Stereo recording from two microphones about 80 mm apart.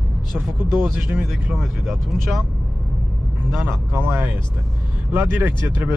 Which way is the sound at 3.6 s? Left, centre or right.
Right.